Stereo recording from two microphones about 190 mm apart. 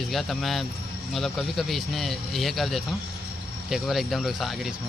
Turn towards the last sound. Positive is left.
turn(degrees=0)  # may be behind; listen again after turning